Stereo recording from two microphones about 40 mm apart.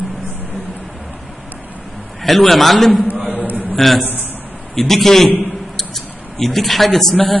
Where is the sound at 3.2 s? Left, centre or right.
Left.